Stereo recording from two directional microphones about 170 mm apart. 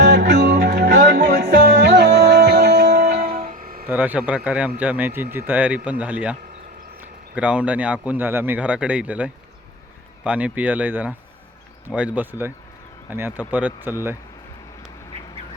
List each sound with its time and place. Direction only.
0.0 s music: 90° right; by 3.3 s 70° right (ahead or behind)
3.4 s music: 55° right (ahead or behind)
3.8 s speech: 10° right (ahead or behind)
7.3 s speech: 5° right (ahead or behind)